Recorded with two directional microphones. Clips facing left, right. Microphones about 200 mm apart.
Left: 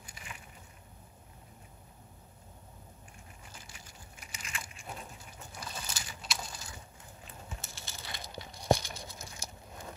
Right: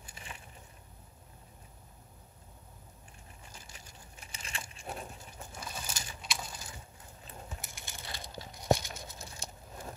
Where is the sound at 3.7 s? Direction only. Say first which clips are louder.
Even; 35° right (ahead or behind).